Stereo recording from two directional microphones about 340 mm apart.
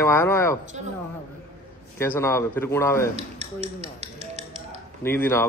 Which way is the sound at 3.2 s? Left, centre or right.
Centre.